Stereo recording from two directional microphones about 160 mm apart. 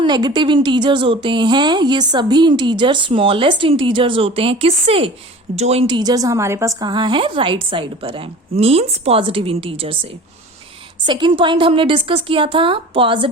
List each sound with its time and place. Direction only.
0.0 s a woman's voice: 25° right (ahead or behind)
5.9 s a woman's voice: 25° right (ahead or behind)